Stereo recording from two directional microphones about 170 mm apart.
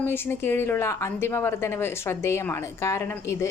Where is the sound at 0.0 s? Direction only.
10° left (ahead or behind).